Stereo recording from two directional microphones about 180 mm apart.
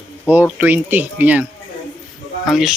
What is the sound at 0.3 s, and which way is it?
Speech, 10° right (ahead or behind).